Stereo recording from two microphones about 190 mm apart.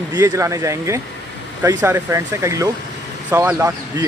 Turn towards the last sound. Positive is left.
turn(degrees=-15)  # may be behind; listen again after turning